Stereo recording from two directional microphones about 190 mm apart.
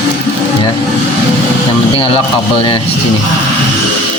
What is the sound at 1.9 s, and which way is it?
Speech, 30° left (ahead or behind).